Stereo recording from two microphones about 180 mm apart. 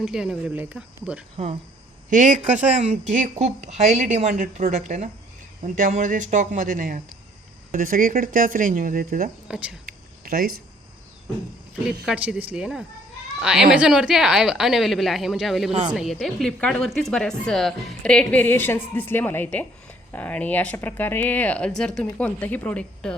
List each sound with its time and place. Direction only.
0.0 s speech: 5° right (ahead or behind)
2.0 s speech: 45° right (ahead or behind)
9.5 s speech: 5° right (ahead or behind)
9.8 s a sound: 55° right (ahead or behind)
12.0 s speech: 5° right (ahead or behind)